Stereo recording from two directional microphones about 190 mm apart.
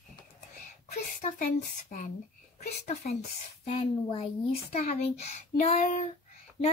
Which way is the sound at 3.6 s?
30° left (ahead or behind).